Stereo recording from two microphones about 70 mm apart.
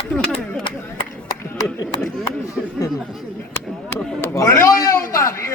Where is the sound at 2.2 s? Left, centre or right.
Left.